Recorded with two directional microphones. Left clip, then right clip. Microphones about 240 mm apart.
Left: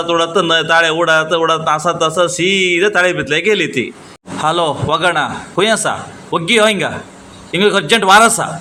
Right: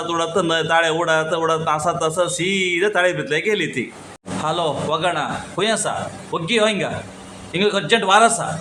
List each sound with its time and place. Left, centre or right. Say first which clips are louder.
0.1 s a man's voice: left 7 dB; centre